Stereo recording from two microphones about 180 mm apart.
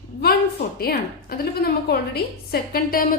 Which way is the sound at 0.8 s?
55° left (ahead or behind).